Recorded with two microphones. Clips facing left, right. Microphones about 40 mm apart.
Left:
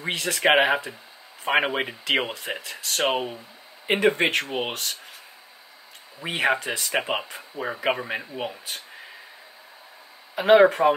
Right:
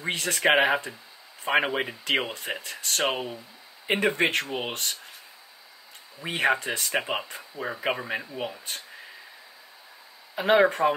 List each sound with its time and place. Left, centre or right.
0.1 s speech: centre
0.4 s speech: centre
2.3 s speech: centre
6.2 s speech: centre
10.3 s speech: left
10.6 s speech: centre